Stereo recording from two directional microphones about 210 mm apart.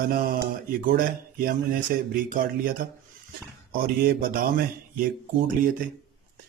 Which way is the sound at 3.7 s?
45° right (ahead or behind).